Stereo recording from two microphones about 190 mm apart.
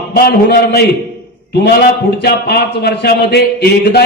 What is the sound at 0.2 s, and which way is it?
A man's voice, 55° left (ahead or behind).